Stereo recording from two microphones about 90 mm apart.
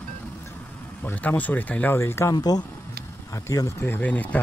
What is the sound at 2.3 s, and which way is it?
Speech, 45° left (ahead or behind).